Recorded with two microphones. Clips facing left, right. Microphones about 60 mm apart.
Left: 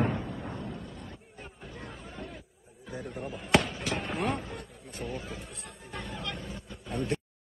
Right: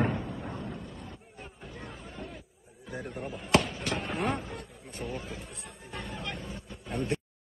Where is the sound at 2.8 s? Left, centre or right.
Centre.